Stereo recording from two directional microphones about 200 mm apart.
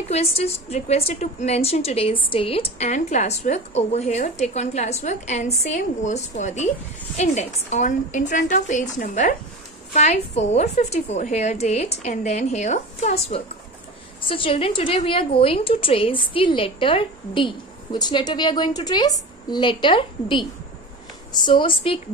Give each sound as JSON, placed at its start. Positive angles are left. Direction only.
{"t": 0.1, "sound": "a woman's voice", "side_deg": 30}